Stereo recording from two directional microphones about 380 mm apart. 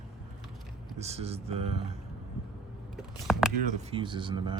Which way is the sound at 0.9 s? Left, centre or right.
Centre.